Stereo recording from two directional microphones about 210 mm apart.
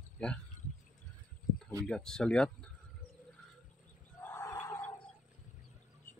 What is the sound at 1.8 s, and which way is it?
Speech, 5° left (ahead or behind).